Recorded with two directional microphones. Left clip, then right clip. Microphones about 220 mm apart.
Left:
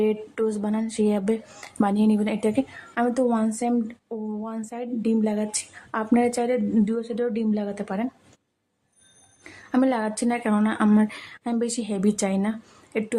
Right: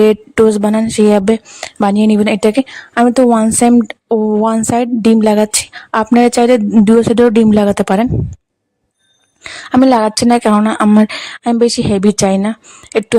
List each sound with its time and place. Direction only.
0.0 s speech: 50° right (ahead or behind)
9.4 s speech: 45° right (ahead or behind)